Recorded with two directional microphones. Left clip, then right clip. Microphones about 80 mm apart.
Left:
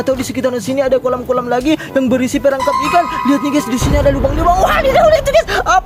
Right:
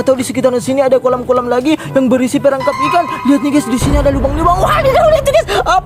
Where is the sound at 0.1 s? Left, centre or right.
Right.